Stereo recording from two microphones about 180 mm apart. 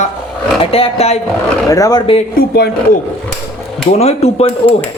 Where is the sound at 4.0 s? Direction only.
35° left (ahead or behind).